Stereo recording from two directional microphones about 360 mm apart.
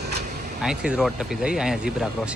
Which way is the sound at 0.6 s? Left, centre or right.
Centre.